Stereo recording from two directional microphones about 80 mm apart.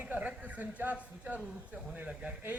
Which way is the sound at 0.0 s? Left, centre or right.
Centre.